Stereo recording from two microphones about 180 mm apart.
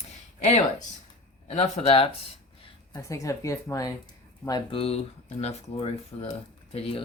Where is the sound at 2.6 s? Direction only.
20° left (ahead or behind).